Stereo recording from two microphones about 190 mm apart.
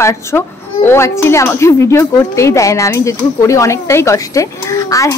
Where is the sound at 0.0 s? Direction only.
15° left (ahead or behind).